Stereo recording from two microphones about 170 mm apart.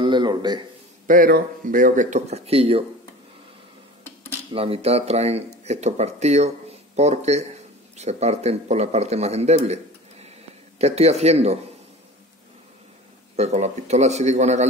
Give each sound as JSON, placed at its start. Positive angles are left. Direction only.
{"t": 0.0, "sound": "a sound", "side_deg": -25}
{"t": 1.0, "sound": "speech", "side_deg": -55}
{"t": 4.5, "sound": "speech", "side_deg": -35}
{"t": 10.8, "sound": "speech", "side_deg": -40}
{"t": 13.4, "sound": "speech", "side_deg": -40}